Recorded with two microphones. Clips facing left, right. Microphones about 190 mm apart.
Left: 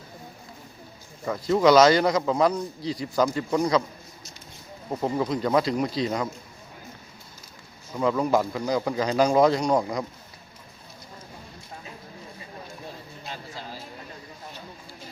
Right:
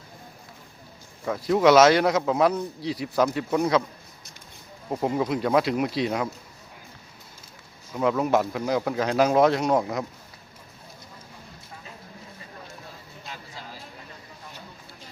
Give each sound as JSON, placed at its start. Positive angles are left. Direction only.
{"t": 1.5, "sound": "a man's voice", "side_deg": -5}
{"t": 4.9, "sound": "a man's voice", "side_deg": -10}
{"t": 7.9, "sound": "a man's voice", "side_deg": -5}
{"t": 13.2, "sound": "a sound", "side_deg": 30}